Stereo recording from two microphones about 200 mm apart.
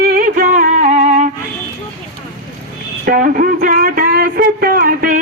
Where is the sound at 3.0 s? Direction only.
45° right (ahead or behind).